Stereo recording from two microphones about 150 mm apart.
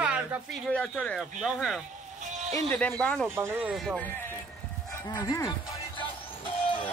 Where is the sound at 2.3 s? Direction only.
50° right (ahead or behind).